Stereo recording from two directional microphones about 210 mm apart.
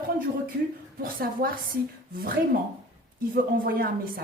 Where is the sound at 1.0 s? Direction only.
45° right (ahead or behind).